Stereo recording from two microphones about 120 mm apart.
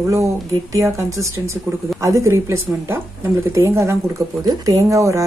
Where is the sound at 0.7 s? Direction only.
25° right (ahead or behind).